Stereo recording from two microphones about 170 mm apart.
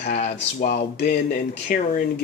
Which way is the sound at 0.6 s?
50° left (ahead or behind).